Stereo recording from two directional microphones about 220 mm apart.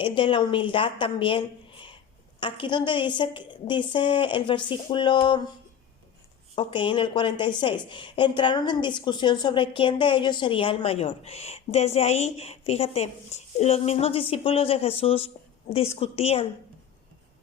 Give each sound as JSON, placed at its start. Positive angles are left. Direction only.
{"t": 0.0, "sound": "a woman's voice", "side_deg": 25}
{"t": 6.6, "sound": "a woman's voice", "side_deg": 20}